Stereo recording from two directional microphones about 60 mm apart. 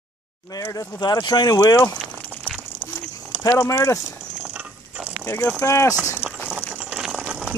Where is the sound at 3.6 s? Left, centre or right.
Left.